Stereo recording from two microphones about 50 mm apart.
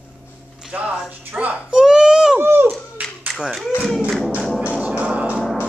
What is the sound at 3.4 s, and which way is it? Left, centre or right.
Speech, centre.